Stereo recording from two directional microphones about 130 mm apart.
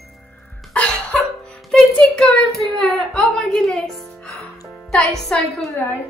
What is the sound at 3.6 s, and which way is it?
Music, centre (ahead or behind).